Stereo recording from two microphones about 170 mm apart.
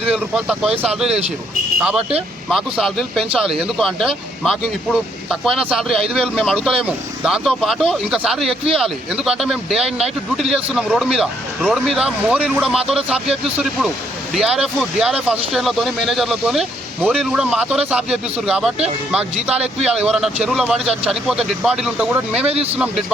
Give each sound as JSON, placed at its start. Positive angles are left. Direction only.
{"t": 0.1, "sound": "speech", "side_deg": -5}
{"t": 22.4, "sound": "speech", "side_deg": -35}
{"t": 22.8, "sound": "speech", "side_deg": 0}